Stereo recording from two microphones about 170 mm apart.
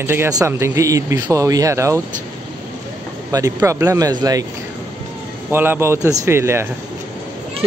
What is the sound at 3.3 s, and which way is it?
A man's voice, 20° right (ahead or behind).